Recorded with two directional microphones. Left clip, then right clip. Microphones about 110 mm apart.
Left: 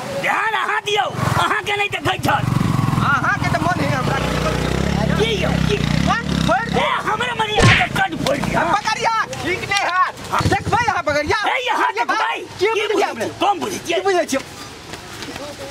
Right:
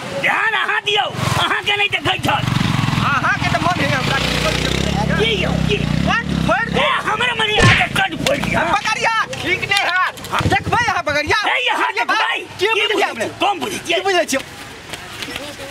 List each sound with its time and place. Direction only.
0.2 s speech: 5° left (ahead or behind)
2.5 s vehicle: 40° right (ahead or behind)
3.1 s vehicle: 10° right (ahead or behind)
3.5 s vehicle: 35° right (ahead or behind)
5.2 s speech: 10° left (ahead or behind)
6.0 s a sound: 5° right (ahead or behind)
11.4 s speech: 5° left (ahead or behind)
11.9 s speech: 10° right (ahead or behind)
14.0 s speech: 10° right (ahead or behind)